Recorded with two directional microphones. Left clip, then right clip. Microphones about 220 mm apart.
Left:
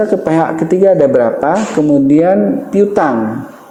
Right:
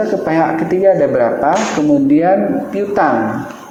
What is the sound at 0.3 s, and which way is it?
A man's voice, 55° left (ahead or behind).